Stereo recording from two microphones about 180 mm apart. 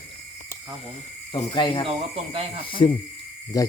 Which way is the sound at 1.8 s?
30° right (ahead or behind).